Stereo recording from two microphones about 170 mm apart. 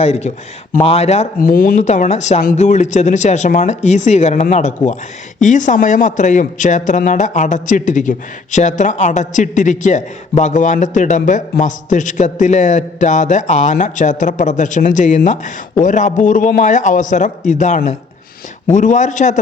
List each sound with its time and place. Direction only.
0.0 s speech: 40° left (ahead or behind)
1.4 s speech: 55° left (ahead or behind)
1.9 s a man's voice: 40° left (ahead or behind)